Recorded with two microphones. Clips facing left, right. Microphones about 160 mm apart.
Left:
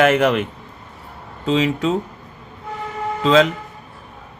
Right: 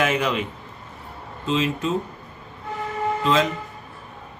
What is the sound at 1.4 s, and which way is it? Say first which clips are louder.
Speech: left 5 dB; 90° left.